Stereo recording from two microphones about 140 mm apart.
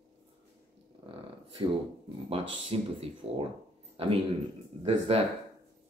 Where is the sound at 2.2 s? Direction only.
45° right (ahead or behind).